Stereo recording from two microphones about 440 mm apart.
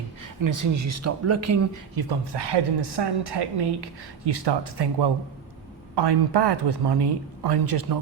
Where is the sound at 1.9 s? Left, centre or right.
Right.